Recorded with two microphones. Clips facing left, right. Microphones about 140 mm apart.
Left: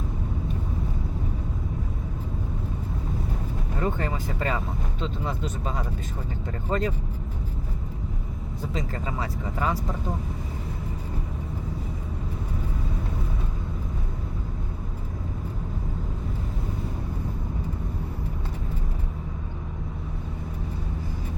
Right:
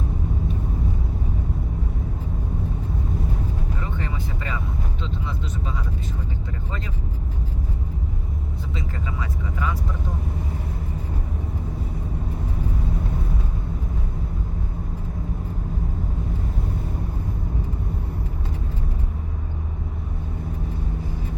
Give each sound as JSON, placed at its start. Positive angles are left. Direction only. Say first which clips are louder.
{"t": 3.8, "sound": "vehicle", "louder": "left 4 dB", "side_deg": 45}
{"t": 6.7, "sound": "speech", "louder": "left 12 dB", "side_deg": 45}
{"t": 8.7, "sound": "vehicle", "louder": "left 2 dB", "side_deg": 35}